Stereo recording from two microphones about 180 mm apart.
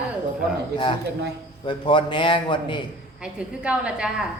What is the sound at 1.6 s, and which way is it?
Speech, 25° left (ahead or behind).